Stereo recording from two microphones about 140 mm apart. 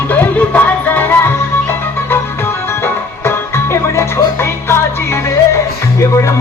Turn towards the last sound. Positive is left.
turn(degrees=20)  # may be behind; listen again after turning